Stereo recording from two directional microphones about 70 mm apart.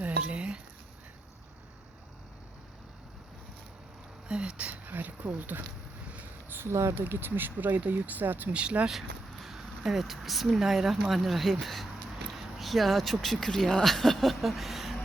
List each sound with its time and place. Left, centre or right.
0.0 s a sound: centre
4.3 s speech: centre
6.5 s speech: right
6.9 s speech: right
9.3 s speech: centre